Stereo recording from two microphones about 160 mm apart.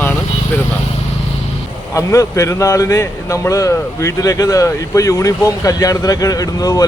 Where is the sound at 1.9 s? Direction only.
20° left (ahead or behind).